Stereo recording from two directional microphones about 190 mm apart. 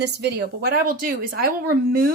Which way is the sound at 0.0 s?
60° right (ahead or behind).